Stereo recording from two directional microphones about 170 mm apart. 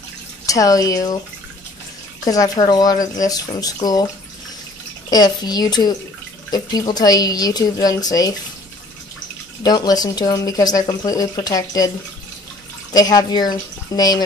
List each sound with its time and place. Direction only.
0.5 s speech: 20° left (ahead or behind)
2.2 s speech: 20° left (ahead or behind)
5.1 s speech: 25° left (ahead or behind)
9.6 s speech: 25° left (ahead or behind)
12.9 s speech: 25° left (ahead or behind)